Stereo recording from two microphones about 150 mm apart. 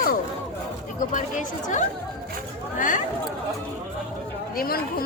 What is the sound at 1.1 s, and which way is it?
A woman's voice, 55° left (ahead or behind).